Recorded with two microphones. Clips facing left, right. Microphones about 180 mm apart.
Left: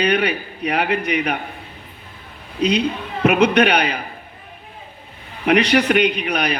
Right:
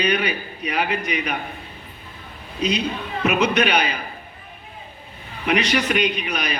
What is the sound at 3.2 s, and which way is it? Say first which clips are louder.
Speech: left 5 dB; 60° left (ahead or behind).